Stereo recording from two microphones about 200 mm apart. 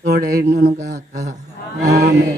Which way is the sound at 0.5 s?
55° right (ahead or behind).